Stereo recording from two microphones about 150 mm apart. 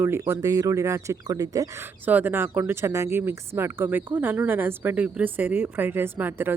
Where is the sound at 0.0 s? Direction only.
15° right (ahead or behind).